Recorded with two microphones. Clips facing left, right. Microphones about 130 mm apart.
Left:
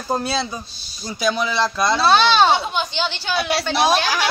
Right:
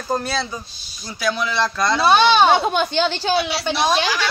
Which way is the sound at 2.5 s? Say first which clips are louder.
Right 3 dB; 50° right (ahead or behind).